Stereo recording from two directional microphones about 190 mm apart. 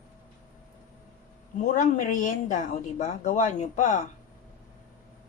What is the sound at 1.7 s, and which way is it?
Speech, 40° left (ahead or behind).